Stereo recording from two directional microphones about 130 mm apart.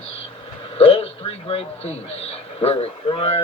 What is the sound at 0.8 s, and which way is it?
A man's voice, 50° left (ahead or behind).